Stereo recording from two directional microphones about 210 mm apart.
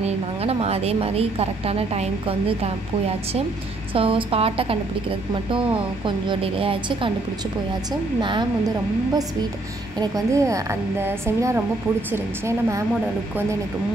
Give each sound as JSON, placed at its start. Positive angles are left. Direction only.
{"t": 0.0, "sound": "a woman's voice", "side_deg": -30}
{"t": 3.9, "sound": "a woman's voice", "side_deg": -25}
{"t": 8.2, "sound": "a woman's voice", "side_deg": -20}